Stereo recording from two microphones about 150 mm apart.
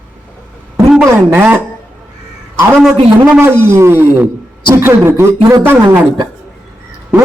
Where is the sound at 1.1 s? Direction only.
15° right (ahead or behind).